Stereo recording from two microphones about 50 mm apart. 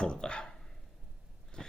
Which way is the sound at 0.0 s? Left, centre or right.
Centre.